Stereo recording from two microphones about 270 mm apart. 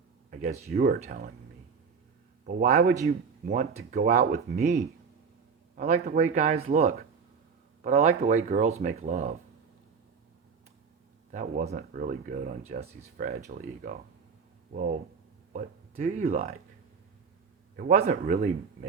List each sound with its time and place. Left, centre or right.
0.3 s speech: right
2.5 s speech: right
11.3 s speech: right
17.7 s speech: right